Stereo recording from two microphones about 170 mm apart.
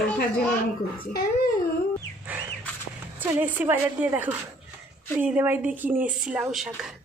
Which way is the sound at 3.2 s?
10° right (ahead or behind).